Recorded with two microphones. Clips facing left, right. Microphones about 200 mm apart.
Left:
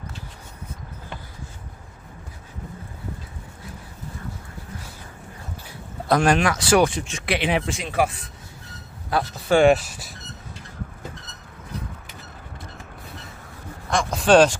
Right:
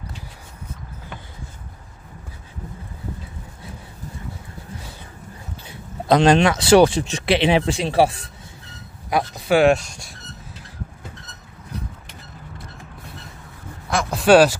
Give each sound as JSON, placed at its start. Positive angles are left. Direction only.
{"t": 6.0, "sound": "speech", "side_deg": -20}
{"t": 9.1, "sound": "speech", "side_deg": -15}
{"t": 9.6, "sound": "speech", "side_deg": 0}
{"t": 13.8, "sound": "a sound", "side_deg": -5}